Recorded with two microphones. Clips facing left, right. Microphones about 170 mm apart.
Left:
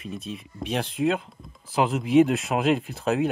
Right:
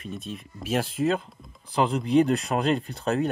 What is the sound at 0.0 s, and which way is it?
Speech, centre (ahead or behind).